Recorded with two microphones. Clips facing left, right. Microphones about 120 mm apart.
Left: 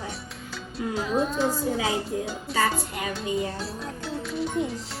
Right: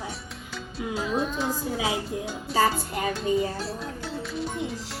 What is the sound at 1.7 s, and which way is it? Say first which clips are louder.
Speech: left 1 dB; 15° right (ahead or behind).